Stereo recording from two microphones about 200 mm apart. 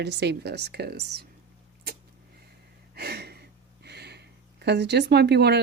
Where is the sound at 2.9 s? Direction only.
55° right (ahead or behind).